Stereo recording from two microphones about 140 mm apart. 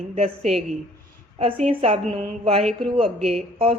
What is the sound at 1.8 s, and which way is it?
Speech, 45° right (ahead or behind).